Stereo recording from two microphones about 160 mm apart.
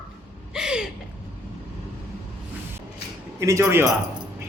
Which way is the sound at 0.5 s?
5° right (ahead or behind).